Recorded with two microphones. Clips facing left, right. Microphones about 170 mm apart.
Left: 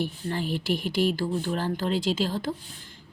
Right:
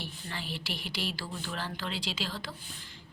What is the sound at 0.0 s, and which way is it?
Speech, 45° left (ahead or behind).